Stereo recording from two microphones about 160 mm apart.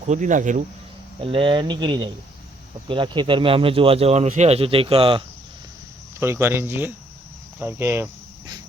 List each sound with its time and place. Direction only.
0.1 s speech: 50° right (ahead or behind)
1.2 s speech: 35° right (ahead or behind)
6.1 s speech: 15° right (ahead or behind)